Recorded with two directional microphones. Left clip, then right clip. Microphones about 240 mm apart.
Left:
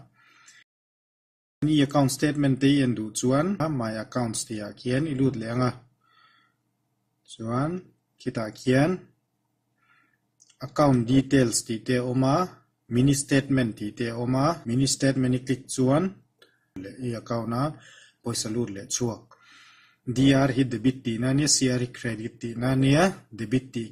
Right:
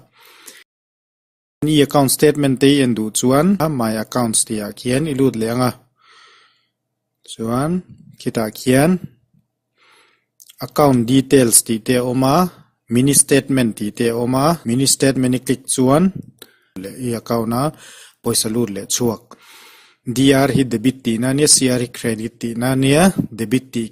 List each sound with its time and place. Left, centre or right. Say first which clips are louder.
1.6 s speech: right 9 dB; right
7.2 s speech: right 9 dB; right
10.4 s speech: right 8 dB; right
20.1 s speech: right 8 dB; right